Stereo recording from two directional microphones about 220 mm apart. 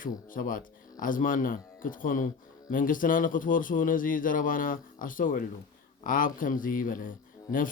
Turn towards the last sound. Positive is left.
turn(degrees=40)  # may be behind; listen again after turning